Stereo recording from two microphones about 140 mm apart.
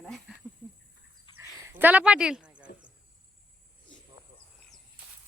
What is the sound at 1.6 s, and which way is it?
Speech, 10° right (ahead or behind).